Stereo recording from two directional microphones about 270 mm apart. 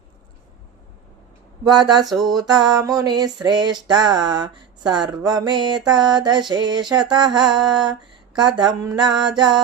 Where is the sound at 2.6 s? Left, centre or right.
Centre.